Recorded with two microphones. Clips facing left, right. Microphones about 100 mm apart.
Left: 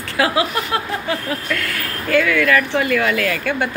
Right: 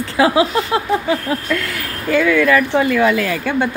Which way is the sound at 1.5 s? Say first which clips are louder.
Right 2 dB; 15° right (ahead or behind).